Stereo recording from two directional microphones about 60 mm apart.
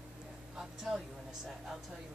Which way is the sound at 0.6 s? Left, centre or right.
Centre.